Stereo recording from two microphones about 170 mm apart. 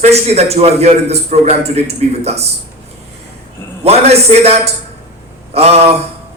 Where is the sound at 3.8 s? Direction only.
40° right (ahead or behind).